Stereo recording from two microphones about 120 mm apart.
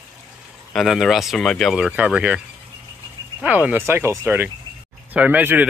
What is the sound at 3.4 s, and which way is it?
Speech, 15° right (ahead or behind).